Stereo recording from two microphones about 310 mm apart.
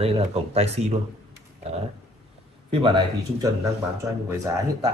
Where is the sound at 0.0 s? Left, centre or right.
Centre.